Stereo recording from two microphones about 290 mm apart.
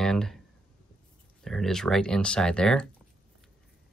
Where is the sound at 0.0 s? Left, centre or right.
Centre.